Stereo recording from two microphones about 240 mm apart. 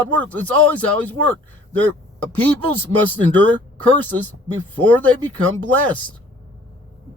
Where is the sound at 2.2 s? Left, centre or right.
Centre.